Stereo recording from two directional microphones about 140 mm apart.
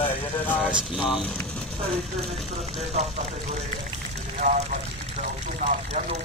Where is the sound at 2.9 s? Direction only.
50° right (ahead or behind).